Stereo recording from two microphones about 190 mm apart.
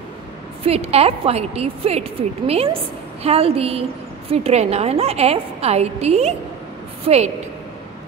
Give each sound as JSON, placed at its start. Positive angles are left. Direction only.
{"t": 0.7, "sound": "a woman's voice", "side_deg": -30}